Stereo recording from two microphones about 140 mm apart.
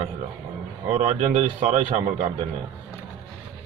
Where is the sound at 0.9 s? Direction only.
50° right (ahead or behind).